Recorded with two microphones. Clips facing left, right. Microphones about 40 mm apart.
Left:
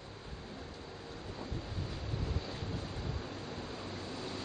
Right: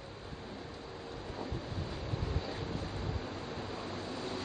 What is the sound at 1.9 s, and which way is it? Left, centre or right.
Vehicle, centre.